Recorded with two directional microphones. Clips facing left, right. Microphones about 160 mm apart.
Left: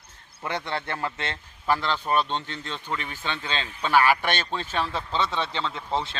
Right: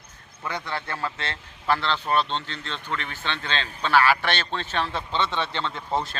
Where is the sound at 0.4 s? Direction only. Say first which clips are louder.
Left 1 dB; 25° left (ahead or behind).